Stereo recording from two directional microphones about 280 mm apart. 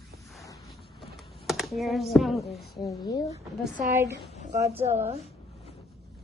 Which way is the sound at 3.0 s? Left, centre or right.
Centre.